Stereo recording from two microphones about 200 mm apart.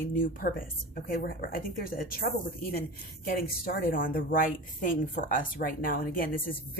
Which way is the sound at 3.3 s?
45° left (ahead or behind).